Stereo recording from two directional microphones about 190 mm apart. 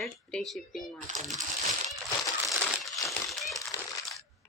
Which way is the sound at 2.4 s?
Centre (ahead or behind).